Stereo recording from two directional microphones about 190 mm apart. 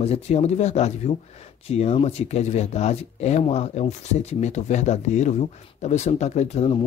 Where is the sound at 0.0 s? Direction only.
35° left (ahead or behind).